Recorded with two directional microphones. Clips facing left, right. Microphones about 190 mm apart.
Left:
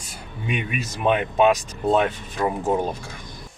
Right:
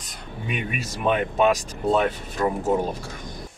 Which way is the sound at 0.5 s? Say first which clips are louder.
Left 2 dB; 40° right (ahead or behind).